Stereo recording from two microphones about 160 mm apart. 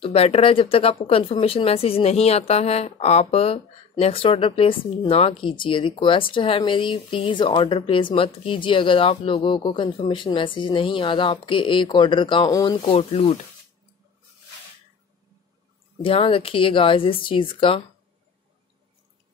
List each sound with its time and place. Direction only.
0.0 s speech: 35° left (ahead or behind)
16.0 s speech: 35° left (ahead or behind)